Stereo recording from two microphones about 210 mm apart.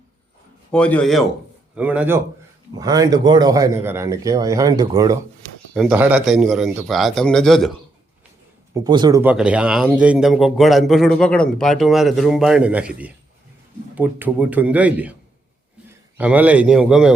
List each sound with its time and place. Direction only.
0.7 s a man's voice: 5° left (ahead or behind)
1.7 s a man's voice: 5° right (ahead or behind)
8.7 s speech: 20° right (ahead or behind)
9.2 s a man's voice: 5° right (ahead or behind)
16.1 s a man's voice: 5° right (ahead or behind)